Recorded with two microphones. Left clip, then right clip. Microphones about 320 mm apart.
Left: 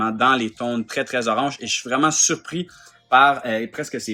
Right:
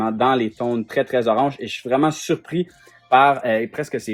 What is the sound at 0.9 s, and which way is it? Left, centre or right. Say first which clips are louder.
Speech: right 4 dB; centre.